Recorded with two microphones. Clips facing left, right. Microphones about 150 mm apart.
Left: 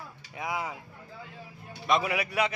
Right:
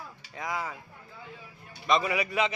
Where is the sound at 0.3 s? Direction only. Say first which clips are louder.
Left 1 dB; 10° left (ahead or behind).